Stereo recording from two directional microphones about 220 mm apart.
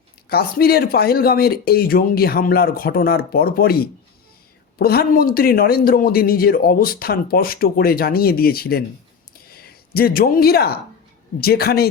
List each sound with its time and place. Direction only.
0.3 s speech: 45° left (ahead or behind)